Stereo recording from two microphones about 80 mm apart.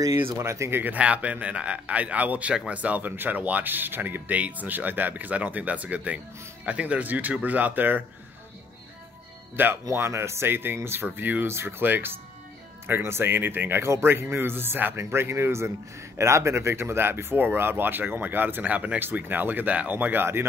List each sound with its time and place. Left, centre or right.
0.1 s a man's voice: right
9.6 s a man's voice: right